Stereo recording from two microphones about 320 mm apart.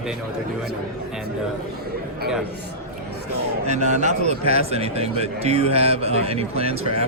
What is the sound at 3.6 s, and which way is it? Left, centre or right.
Speech, right.